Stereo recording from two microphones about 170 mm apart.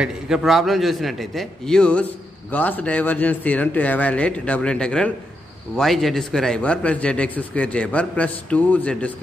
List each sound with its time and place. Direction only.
0.0 s a man's voice: 5° right (ahead or behind)